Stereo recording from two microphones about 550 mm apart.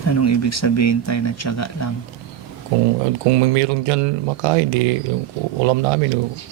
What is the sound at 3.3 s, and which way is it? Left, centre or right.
Speech, right.